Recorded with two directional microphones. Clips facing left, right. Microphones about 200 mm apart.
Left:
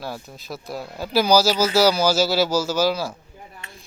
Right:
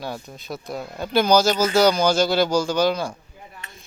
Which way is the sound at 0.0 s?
Centre (ahead or behind).